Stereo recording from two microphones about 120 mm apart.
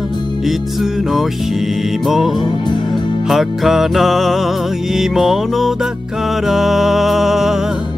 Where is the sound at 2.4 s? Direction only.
40° left (ahead or behind).